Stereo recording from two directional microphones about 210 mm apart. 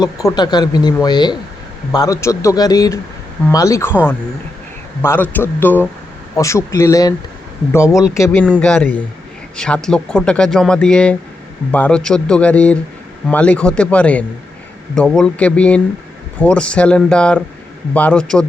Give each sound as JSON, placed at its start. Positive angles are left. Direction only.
{"t": 0.0, "sound": "speech", "side_deg": 15}
{"t": 5.0, "sound": "speech", "side_deg": 10}